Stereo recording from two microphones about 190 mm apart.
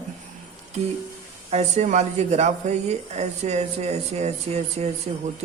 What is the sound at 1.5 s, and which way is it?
Speech, 35° right (ahead or behind).